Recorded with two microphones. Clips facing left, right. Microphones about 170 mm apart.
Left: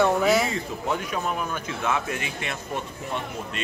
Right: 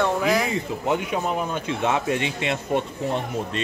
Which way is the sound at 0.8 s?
20° right (ahead or behind).